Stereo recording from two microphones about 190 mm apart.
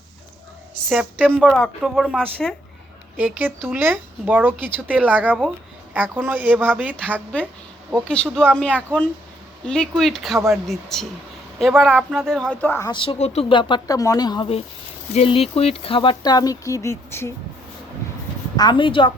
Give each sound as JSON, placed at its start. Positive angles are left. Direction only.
{"t": 0.7, "sound": "a sound", "side_deg": 0}
{"t": 1.5, "sound": "speech", "side_deg": 5}
{"t": 3.2, "sound": "speech", "side_deg": -10}
{"t": 7.9, "sound": "speech", "side_deg": 5}
{"t": 12.9, "sound": "speech", "side_deg": 25}
{"t": 18.5, "sound": "speech", "side_deg": 25}